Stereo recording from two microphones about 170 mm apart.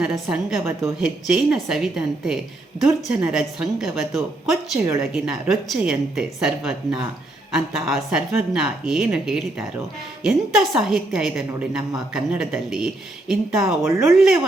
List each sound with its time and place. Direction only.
0.0 s a woman's voice: 5° right (ahead or behind)
0.6 s speech: 15° right (ahead or behind)
1.0 s a woman's voice: 5° right (ahead or behind)